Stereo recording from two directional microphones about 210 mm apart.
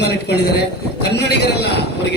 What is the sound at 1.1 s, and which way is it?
Speech, 55° left (ahead or behind).